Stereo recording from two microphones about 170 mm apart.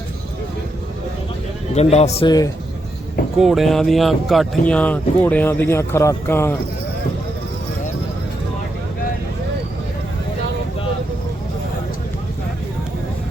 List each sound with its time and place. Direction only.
1.7 s a man's voice: 40° left (ahead or behind)
2.2 s speech: 20° left (ahead or behind)
3.3 s speech: centre (ahead or behind)